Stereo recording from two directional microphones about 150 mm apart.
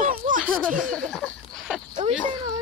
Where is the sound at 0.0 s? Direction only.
65° right (ahead or behind).